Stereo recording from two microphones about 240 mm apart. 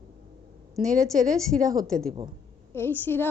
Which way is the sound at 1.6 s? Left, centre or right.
Centre.